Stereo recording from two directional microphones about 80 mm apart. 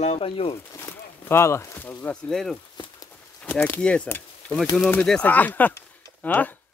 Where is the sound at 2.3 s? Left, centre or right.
Centre.